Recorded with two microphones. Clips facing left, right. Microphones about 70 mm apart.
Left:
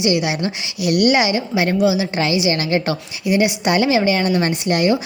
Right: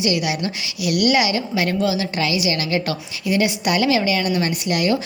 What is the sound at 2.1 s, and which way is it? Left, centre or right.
Speech, left.